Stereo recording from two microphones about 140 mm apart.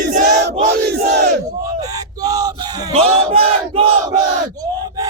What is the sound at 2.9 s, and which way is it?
Battle cry, 45° right (ahead or behind).